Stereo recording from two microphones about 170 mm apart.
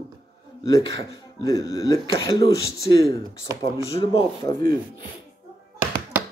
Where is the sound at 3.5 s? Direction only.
20° right (ahead or behind).